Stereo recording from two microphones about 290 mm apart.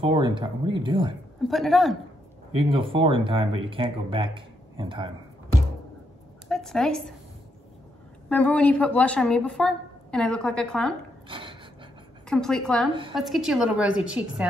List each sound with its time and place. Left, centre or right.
0.0 s speech: centre
1.5 s a woman's voice: centre
2.5 s speech: centre
6.5 s a woman's voice: centre
8.3 s a woman's voice: centre
11.2 s a sound: centre
12.3 s a woman's voice: centre